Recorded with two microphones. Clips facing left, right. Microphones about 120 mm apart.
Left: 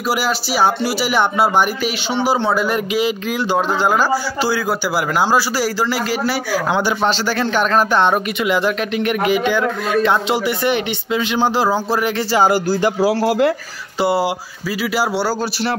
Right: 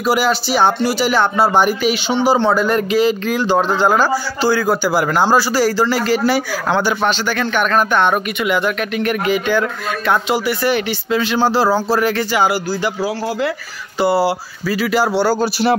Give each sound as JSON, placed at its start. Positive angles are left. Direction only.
{"t": 0.0, "sound": "speech", "side_deg": 5}
{"t": 6.8, "sound": "speech", "side_deg": 25}
{"t": 12.3, "sound": "speech", "side_deg": 35}
{"t": 12.5, "sound": "speech", "side_deg": 50}
{"t": 13.1, "sound": "speech", "side_deg": 65}
{"t": 13.9, "sound": "speech", "side_deg": 25}
{"t": 14.7, "sound": "speech", "side_deg": 10}